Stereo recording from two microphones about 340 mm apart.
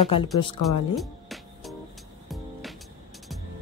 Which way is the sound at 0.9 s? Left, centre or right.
Centre.